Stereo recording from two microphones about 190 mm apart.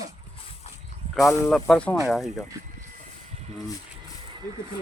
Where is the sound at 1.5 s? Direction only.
5° left (ahead or behind).